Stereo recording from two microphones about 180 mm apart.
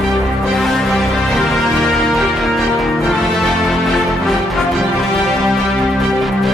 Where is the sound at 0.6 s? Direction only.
Centre (ahead or behind).